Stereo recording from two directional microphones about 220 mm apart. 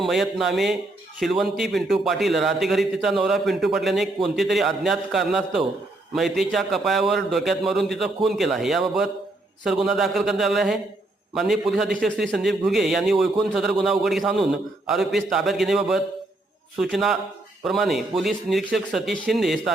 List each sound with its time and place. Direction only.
0.0 s a man's voice: centre (ahead or behind)